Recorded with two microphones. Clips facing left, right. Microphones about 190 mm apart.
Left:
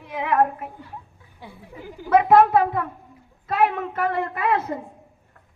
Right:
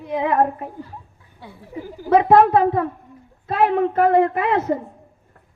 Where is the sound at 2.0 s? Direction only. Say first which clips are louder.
Right 2 dB; 30° right (ahead or behind).